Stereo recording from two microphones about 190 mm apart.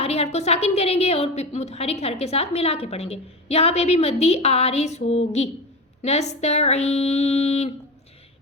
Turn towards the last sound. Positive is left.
turn(degrees=35)  # may be behind; listen again after turning